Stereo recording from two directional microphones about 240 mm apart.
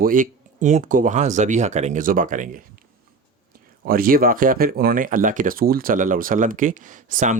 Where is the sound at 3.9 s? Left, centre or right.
Right.